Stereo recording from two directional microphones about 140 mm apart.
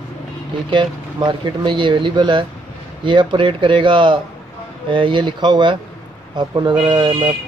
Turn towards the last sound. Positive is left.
turn(degrees=-35)  # may be behind; listen again after turning